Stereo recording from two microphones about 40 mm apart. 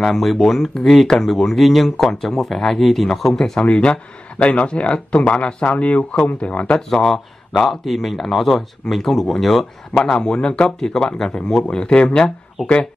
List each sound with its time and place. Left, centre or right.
0.0 s a man's voice: centre
3.5 s speech: left
6.9 s a man's voice: centre
10.0 s speech: centre
11.7 s speech: left